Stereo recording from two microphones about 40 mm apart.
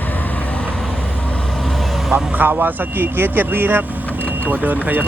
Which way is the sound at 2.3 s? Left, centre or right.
Right.